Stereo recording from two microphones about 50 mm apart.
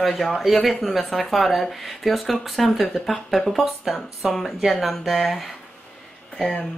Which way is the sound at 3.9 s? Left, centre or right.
Centre.